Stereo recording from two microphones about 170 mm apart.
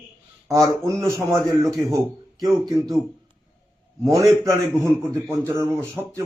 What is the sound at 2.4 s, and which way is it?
Speech, 20° right (ahead or behind).